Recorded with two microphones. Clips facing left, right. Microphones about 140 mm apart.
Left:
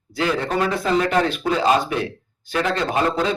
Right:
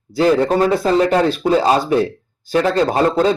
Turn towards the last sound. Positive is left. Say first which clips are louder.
# right 6 dB
turn(degrees=-35)  # may be behind; listen again after turning